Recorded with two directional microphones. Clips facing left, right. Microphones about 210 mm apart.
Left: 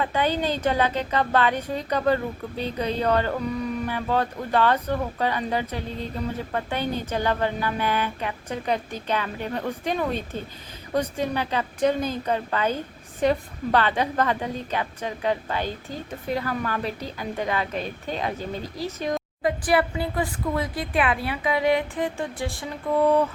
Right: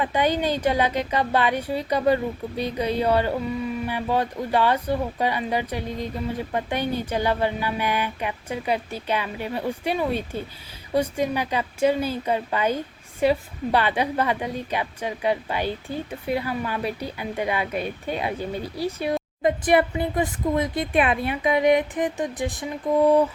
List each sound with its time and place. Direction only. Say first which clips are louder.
0.0 s a woman's voice: right 2 dB; 15° right (ahead or behind)
19.4 s speech: right 3 dB; 20° right (ahead or behind)